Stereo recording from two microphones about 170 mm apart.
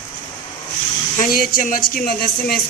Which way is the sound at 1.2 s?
55° left (ahead or behind).